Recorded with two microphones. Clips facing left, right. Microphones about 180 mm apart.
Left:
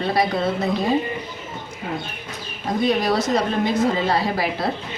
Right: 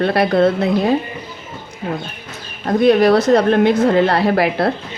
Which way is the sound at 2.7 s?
65° right (ahead or behind).